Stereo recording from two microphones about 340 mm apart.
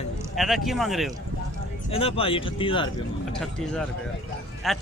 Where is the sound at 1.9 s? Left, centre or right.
Centre.